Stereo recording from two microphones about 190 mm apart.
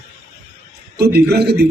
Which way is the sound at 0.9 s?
55° right (ahead or behind).